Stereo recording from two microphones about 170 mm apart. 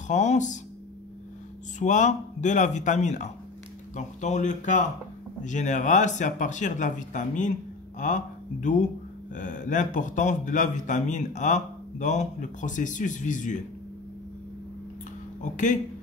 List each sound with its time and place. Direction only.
0.1 s speech: 45° left (ahead or behind)
1.8 s speech: 45° left (ahead or behind)
15.4 s speech: 45° left (ahead or behind)